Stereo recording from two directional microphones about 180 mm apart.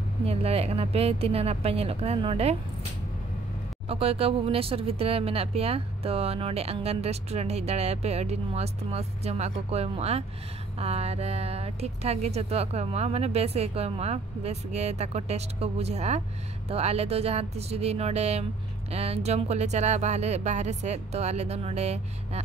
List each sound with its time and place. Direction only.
0.3 s speech: 35° right (ahead or behind)
3.9 s speech: 35° right (ahead or behind)